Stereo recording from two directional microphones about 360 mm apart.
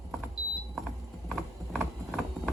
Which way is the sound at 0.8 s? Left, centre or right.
Centre.